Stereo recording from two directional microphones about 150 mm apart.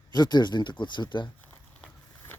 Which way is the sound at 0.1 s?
30° left (ahead or behind).